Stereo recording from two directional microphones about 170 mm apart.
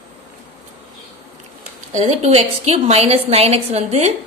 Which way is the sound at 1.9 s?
40° right (ahead or behind).